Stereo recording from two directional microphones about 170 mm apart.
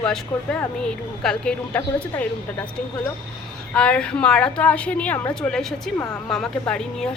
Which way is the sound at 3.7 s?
5° left (ahead or behind).